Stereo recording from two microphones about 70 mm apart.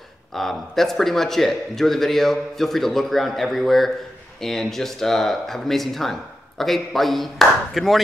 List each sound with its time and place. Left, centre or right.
0.3 s a man's voice: centre